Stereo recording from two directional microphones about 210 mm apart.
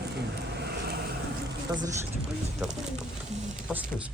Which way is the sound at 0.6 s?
45° right (ahead or behind).